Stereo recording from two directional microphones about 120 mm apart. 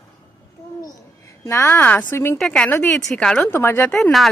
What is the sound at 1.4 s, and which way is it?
Speech, 20° left (ahead or behind).